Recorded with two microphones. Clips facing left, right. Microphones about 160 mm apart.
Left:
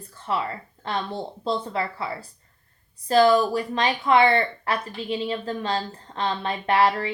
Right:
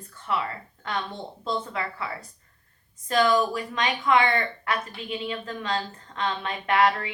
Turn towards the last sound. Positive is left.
turn(degrees=30)  # may be behind; listen again after turning